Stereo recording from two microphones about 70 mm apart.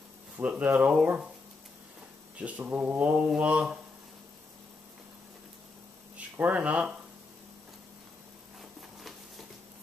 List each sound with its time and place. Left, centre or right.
0.4 s speech: centre
2.3 s speech: right
6.1 s speech: right